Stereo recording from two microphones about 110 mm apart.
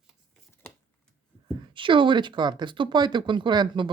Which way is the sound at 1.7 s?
50° right (ahead or behind).